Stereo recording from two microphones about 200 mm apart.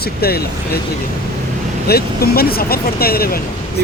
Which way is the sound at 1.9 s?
50° left (ahead or behind).